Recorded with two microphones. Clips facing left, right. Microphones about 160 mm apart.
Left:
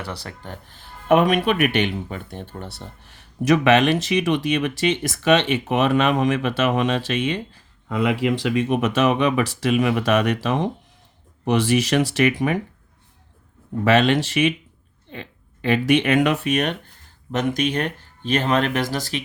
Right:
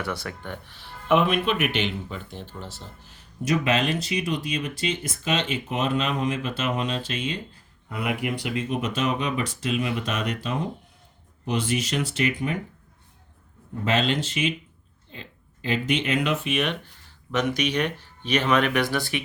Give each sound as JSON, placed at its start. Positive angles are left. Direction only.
{"t": 0.0, "sound": "speech", "side_deg": 35}
{"t": 1.2, "sound": "speech", "side_deg": 65}
{"t": 7.9, "sound": "speech", "side_deg": 90}
{"t": 13.8, "sound": "speech", "side_deg": 70}
{"t": 16.5, "sound": "speech", "side_deg": 45}